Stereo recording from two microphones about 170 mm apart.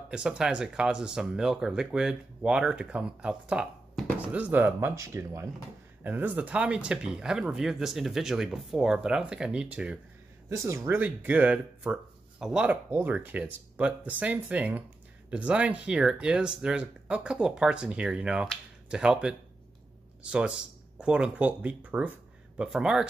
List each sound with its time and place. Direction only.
0.1 s speech: 5° right (ahead or behind)
10.5 s speech: 15° right (ahead or behind)